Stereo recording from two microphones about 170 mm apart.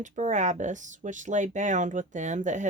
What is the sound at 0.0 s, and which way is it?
Speech, 45° right (ahead or behind).